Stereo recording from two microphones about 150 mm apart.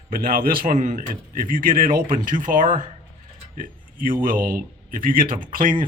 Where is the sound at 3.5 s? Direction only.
65° right (ahead or behind).